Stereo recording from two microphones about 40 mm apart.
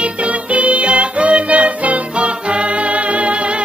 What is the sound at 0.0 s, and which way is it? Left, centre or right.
Music, right.